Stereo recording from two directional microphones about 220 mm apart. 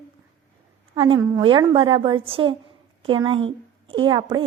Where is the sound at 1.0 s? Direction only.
25° right (ahead or behind).